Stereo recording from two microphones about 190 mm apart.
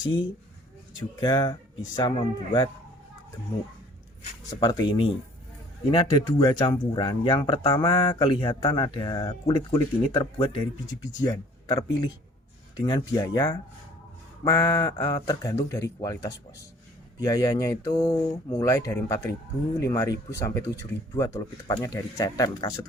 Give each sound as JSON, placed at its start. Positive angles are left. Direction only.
{"t": 0.0, "sound": "speech", "side_deg": 25}
{"t": 4.4, "sound": "speech", "side_deg": 20}